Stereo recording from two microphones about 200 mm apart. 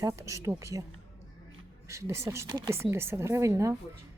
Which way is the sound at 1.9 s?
15° right (ahead or behind).